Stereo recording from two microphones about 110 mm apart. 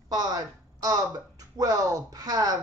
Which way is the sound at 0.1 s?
35° right (ahead or behind).